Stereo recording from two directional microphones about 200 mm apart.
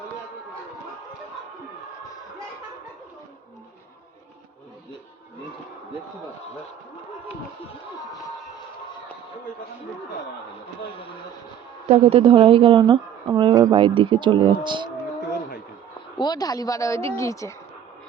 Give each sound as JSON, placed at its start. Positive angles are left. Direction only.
{"t": 11.9, "sound": "a woman's voice", "side_deg": -30}
{"t": 16.1, "sound": "a woman's voice", "side_deg": 20}